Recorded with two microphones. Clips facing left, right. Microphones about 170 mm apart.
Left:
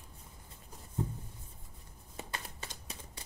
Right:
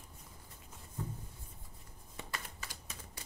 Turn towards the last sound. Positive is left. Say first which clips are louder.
# left 2 dB
turn(degrees=25)  # may be behind; listen again after turning